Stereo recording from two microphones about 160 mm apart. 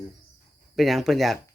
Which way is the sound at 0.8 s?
Centre (ahead or behind).